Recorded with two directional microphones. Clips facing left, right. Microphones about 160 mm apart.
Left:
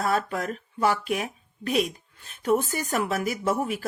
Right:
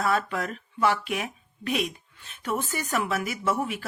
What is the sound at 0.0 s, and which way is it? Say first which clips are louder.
Speech: even; 40° left (ahead or behind).